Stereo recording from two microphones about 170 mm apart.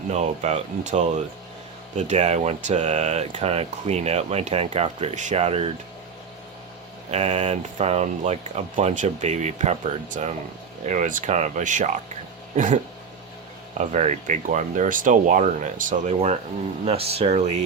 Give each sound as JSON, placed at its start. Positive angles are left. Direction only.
{"t": 0.1, "sound": "speech", "side_deg": -40}
{"t": 7.1, "sound": "speech", "side_deg": -40}